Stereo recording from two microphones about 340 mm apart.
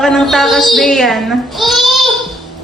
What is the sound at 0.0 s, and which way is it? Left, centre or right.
A child's voice, centre.